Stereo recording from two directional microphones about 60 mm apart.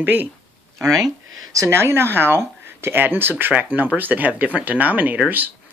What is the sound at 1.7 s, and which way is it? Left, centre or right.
Speech, right.